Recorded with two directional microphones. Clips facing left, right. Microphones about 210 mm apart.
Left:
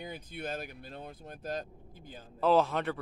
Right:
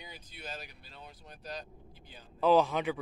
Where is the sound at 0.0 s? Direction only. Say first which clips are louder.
Left 8 dB; 55° left (ahead or behind).